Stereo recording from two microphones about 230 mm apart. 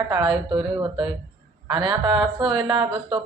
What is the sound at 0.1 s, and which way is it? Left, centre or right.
Speech, right.